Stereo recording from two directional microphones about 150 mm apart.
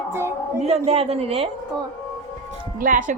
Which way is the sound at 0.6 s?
45° right (ahead or behind).